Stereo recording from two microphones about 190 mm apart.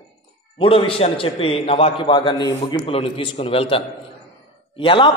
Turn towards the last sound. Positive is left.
turn(degrees=25)  # may be behind; listen again after turning